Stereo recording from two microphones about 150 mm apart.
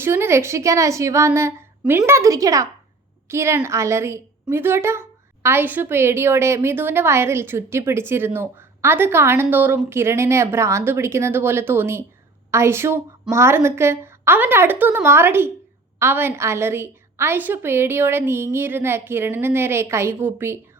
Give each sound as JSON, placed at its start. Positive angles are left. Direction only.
{"t": 0.0, "sound": "a woman's voice", "side_deg": -15}
{"t": 1.8, "sound": "a woman's voice", "side_deg": -5}
{"t": 2.0, "sound": "a woman's voice", "side_deg": -20}